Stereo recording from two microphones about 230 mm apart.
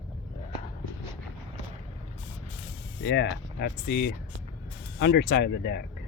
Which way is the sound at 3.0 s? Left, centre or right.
Left.